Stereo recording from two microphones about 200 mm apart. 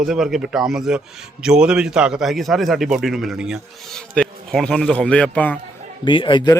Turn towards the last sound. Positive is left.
turn(degrees=25)  # may be behind; listen again after turning